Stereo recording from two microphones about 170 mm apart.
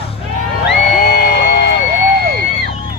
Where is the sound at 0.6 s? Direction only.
70° left (ahead or behind).